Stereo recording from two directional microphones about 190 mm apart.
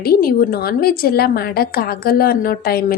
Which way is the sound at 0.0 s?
55° left (ahead or behind).